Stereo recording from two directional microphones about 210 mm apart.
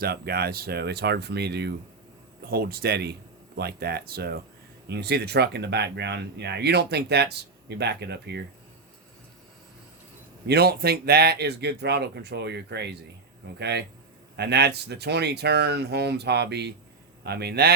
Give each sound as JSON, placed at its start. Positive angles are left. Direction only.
{"t": 0.0, "sound": "speech", "side_deg": -50}
{"t": 10.4, "sound": "speech", "side_deg": -50}